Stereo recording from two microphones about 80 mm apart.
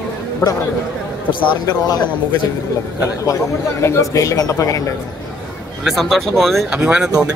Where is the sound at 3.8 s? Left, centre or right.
Left.